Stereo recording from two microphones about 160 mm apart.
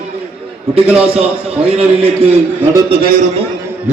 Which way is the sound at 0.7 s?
40° right (ahead or behind).